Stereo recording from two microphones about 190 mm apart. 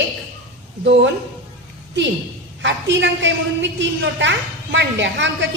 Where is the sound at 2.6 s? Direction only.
75° right (ahead or behind).